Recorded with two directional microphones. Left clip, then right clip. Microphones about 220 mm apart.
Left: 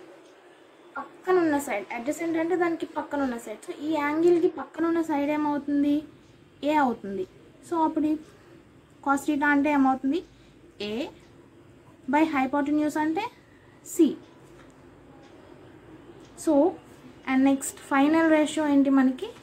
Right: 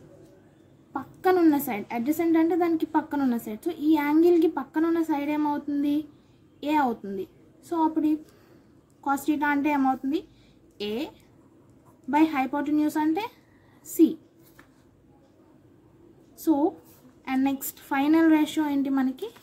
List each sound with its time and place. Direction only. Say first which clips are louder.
1.3 s a woman's voice: even; 45° right (ahead or behind)
12.1 s a woman's voice: even; 45° right (ahead or behind)
16.5 s a woman's voice: left 2 dB; 40° right (ahead or behind)